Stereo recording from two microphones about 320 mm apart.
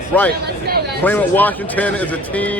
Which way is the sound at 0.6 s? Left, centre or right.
Right.